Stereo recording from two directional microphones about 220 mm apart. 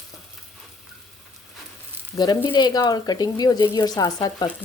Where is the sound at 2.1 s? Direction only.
20° left (ahead or behind).